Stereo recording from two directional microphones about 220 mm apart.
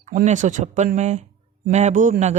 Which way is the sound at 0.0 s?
35° right (ahead or behind).